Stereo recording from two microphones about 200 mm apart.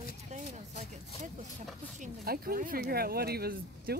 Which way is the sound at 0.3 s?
35° right (ahead or behind).